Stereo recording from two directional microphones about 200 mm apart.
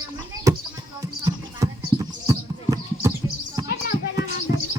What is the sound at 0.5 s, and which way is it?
Music, 15° right (ahead or behind).